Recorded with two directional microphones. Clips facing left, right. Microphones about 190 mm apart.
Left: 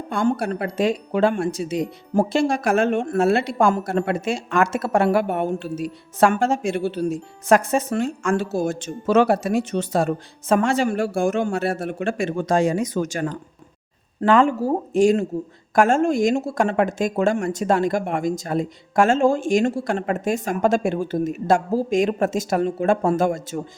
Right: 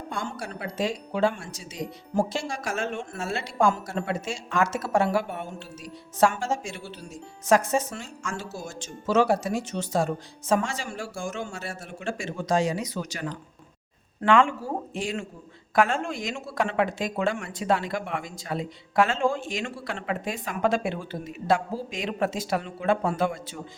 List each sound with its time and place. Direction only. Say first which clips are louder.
0.1 s speech: left 14 dB; 55° left (ahead or behind)